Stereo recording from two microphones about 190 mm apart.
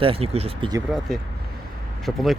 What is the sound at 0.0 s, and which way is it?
Speech, 30° right (ahead or behind).